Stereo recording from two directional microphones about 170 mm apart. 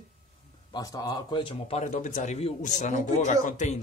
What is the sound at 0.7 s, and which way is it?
Speech, 20° left (ahead or behind).